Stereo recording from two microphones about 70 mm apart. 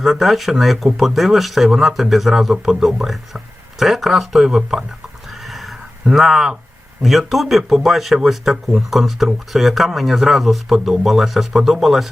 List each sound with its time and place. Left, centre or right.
0.0 s speech: centre
5.3 s a sound: centre
7.0 s speech: centre